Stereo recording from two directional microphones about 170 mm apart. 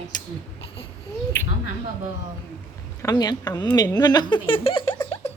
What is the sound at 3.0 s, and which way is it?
Speech, 20° left (ahead or behind).